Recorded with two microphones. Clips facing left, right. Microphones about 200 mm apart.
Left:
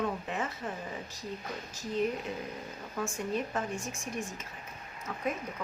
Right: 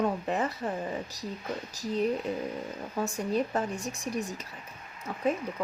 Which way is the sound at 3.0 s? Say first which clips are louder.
Right 4 dB; 35° right (ahead or behind).